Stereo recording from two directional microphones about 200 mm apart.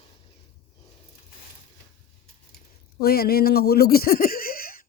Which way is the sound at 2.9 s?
50° left (ahead or behind).